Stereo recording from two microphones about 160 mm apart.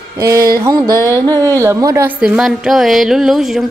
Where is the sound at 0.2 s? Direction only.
20° right (ahead or behind).